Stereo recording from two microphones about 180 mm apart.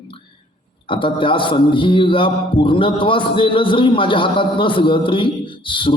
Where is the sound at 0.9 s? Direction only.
30° left (ahead or behind).